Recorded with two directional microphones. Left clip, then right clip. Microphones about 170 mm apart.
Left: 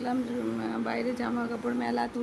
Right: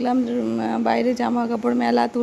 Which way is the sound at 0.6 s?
45° right (ahead or behind).